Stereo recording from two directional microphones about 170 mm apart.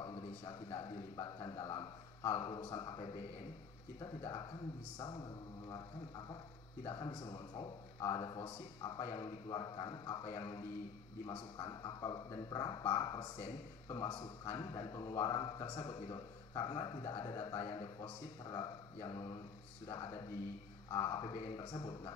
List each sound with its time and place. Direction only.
0.0 s a man's voice: 25° left (ahead or behind)